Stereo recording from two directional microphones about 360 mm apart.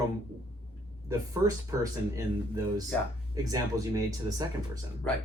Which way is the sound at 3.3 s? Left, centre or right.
Centre.